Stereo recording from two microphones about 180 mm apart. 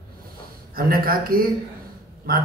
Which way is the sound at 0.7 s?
55° right (ahead or behind).